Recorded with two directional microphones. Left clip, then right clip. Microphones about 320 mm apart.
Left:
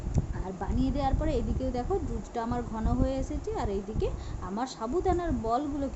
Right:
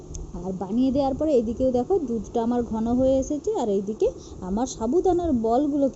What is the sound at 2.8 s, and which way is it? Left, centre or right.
A woman's voice, centre.